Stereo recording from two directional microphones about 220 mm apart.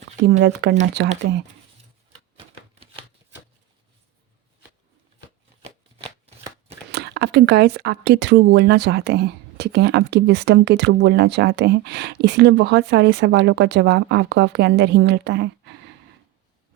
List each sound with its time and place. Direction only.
0.3 s speech: 55° right (ahead or behind)
5.6 s shuffling cards: 25° right (ahead or behind)
6.9 s speech: 50° right (ahead or behind)